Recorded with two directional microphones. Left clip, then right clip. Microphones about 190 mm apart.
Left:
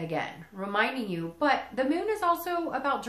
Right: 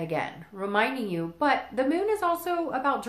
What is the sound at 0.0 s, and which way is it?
Speech, 45° right (ahead or behind).